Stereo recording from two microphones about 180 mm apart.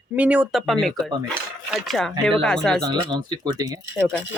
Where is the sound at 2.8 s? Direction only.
25° right (ahead or behind).